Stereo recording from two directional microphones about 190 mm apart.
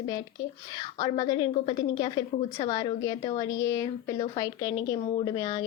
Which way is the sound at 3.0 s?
20° left (ahead or behind).